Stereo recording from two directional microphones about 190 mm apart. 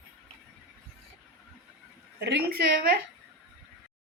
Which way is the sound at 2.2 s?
60° right (ahead or behind).